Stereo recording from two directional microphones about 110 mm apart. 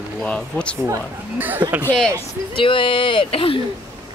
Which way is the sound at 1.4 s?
15° right (ahead or behind).